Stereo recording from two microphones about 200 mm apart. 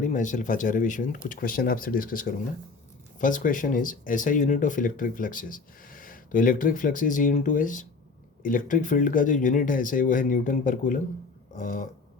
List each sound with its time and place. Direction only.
0.0 s speech: 40° left (ahead or behind)